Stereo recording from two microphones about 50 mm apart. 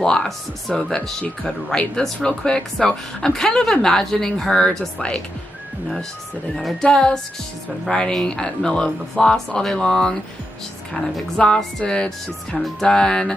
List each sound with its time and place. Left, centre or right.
0.0 s speech: centre
2.2 s speech: centre
6.8 s speech: centre
11.3 s speech: centre